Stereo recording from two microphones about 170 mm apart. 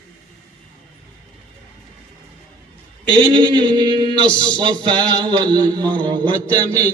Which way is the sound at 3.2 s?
25° right (ahead or behind).